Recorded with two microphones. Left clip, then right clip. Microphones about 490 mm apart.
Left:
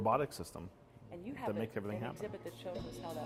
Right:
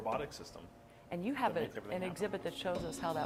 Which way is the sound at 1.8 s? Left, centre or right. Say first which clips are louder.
Left 4 dB; left.